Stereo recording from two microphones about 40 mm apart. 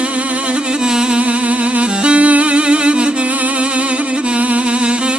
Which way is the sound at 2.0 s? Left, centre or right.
Right.